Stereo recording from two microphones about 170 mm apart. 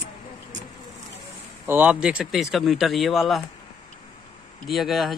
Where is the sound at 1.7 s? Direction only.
10° right (ahead or behind).